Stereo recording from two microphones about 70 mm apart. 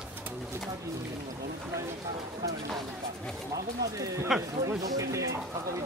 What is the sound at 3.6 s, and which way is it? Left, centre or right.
Speech, right.